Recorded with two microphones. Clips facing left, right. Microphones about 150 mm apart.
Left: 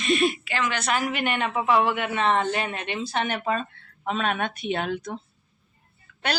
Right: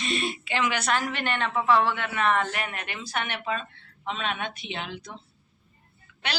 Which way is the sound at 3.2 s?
40° left (ahead or behind).